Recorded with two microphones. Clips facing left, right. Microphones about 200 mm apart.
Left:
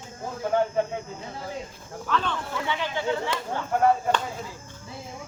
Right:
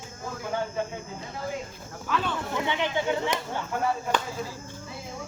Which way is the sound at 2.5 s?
20° right (ahead or behind).